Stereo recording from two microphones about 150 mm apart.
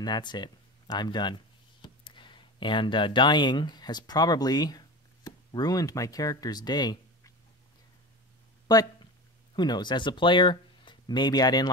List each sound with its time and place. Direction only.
0.0 s speech: 30° left (ahead or behind)
8.6 s a sound: 25° left (ahead or behind)
9.6 s speech: 30° left (ahead or behind)